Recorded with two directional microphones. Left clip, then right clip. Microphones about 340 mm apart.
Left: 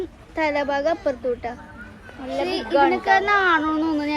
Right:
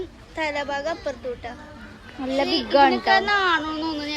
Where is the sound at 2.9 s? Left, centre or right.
Centre.